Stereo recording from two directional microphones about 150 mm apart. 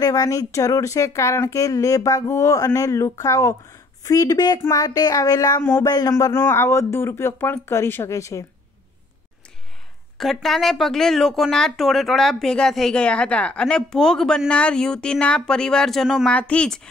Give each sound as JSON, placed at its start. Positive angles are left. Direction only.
{"t": 0.0, "sound": "speech", "side_deg": 25}
{"t": 10.1, "sound": "speech", "side_deg": 0}